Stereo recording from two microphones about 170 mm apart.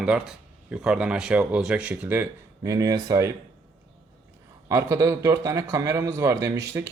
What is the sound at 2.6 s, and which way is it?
Speech, 20° right (ahead or behind).